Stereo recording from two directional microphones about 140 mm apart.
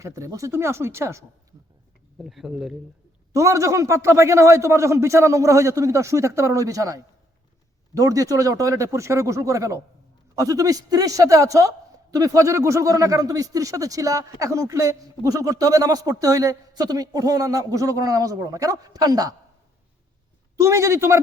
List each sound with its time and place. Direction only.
0.0 s speech: 25° right (ahead or behind)
2.1 s speech: centre (ahead or behind)
3.3 s speech: 20° right (ahead or behind)
20.6 s speech: 20° right (ahead or behind)